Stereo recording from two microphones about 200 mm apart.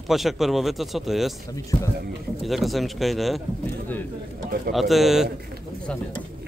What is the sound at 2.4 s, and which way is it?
Speech, centre (ahead or behind).